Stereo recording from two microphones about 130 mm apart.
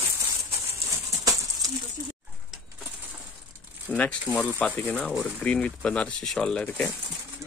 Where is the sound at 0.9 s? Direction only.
25° right (ahead or behind).